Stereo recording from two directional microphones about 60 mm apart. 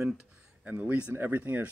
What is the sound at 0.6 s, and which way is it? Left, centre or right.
Speech, right.